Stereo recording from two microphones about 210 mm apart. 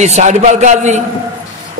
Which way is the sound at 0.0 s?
35° right (ahead or behind).